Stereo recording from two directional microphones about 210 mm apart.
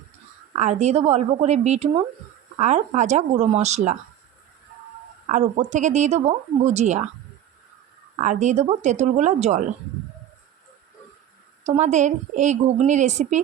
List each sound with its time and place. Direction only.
0.5 s a woman's voice: 35° right (ahead or behind)
5.3 s a woman's voice: 35° right (ahead or behind)
8.2 s a woman's voice: 35° right (ahead or behind)
11.6 s a woman's voice: 35° right (ahead or behind)